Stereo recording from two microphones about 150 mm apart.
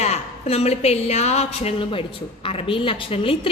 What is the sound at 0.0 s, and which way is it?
A woman's voice, 45° left (ahead or behind).